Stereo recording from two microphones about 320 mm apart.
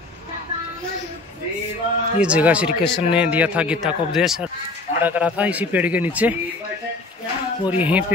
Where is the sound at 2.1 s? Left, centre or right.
Centre.